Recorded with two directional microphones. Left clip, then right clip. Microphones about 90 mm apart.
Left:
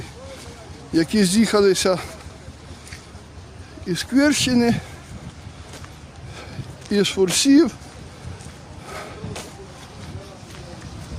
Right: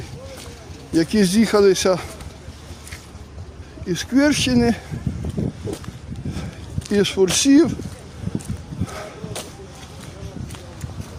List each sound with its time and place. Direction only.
0.9 s speech: 10° left (ahead or behind)
3.8 s speech: 5° left (ahead or behind)
6.9 s speech: 10° left (ahead or behind)
8.9 s a sound: 20° left (ahead or behind)